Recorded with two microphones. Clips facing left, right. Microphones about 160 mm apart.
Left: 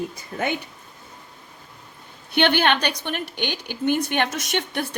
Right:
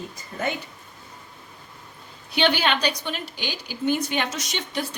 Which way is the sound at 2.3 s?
60° left (ahead or behind).